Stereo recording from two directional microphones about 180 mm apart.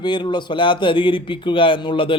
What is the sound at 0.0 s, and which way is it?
A man's voice, 25° left (ahead or behind).